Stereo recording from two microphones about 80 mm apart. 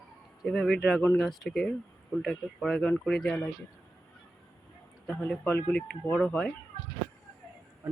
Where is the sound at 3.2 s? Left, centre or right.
Centre.